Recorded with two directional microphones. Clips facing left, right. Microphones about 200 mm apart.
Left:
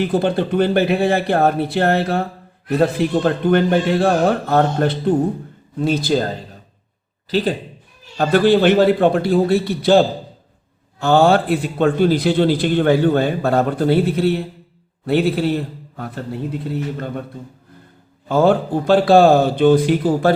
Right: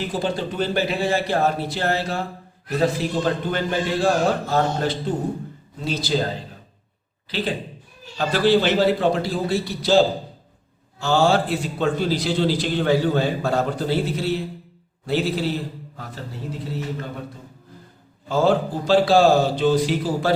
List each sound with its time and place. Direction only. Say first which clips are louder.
0.0 s a man's voice: left 7 dB; 60° left (ahead or behind)
7.3 s speech: left 7 dB; 45° left (ahead or behind)
8.2 s a man's voice: left 5 dB; 55° left (ahead or behind)
11.0 s a man's voice: left 5 dB; 55° left (ahead or behind)
18.3 s a man's voice: left 4 dB; 55° left (ahead or behind)